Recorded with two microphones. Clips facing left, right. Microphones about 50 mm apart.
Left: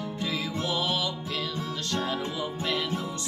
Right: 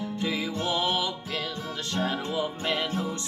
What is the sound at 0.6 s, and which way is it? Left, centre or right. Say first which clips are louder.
Music: right 2 dB; right.